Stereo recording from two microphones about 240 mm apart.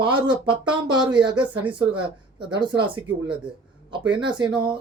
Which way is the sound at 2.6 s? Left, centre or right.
Centre.